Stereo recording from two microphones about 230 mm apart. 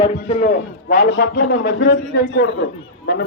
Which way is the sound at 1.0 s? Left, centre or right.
Left.